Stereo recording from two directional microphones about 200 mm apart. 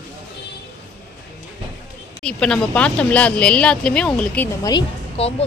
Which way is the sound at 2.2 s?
5° left (ahead or behind).